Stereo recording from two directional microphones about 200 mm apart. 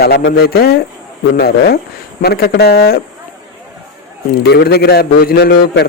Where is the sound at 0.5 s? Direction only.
50° left (ahead or behind).